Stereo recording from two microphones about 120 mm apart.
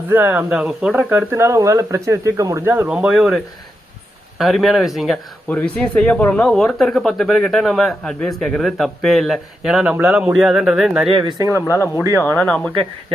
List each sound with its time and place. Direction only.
0.1 s speech: 15° right (ahead or behind)
0.5 s speech: 5° right (ahead or behind)
2.9 s speech: 5° right (ahead or behind)
5.5 s speech: 10° left (ahead or behind)
11.1 s speech: 35° right (ahead or behind)
12.1 s speech: 15° left (ahead or behind)